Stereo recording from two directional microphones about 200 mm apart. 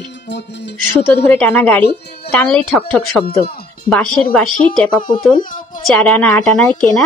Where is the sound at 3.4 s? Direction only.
50° left (ahead or behind).